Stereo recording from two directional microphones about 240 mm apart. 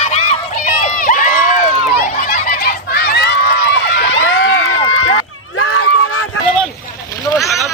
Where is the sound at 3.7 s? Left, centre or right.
Left.